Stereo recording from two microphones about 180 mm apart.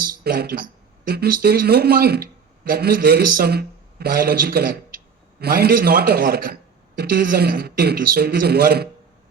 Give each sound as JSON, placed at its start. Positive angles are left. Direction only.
{"t": 0.3, "sound": "speech", "side_deg": -55}